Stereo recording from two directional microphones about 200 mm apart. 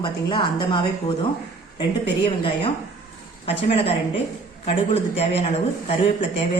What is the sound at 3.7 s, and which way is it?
Speech, 30° left (ahead or behind).